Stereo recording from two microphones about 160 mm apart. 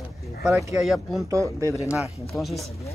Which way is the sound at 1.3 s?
20° right (ahead or behind).